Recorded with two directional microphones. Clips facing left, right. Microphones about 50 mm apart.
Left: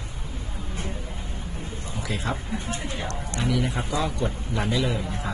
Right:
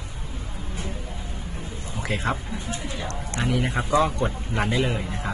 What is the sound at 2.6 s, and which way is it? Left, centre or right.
Speech, left.